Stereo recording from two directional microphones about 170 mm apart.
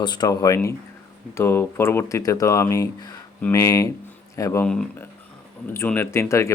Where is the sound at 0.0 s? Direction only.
25° left (ahead or behind).